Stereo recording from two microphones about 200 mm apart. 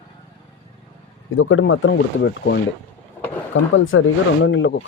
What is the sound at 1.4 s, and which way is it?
Speech, 75° left (ahead or behind).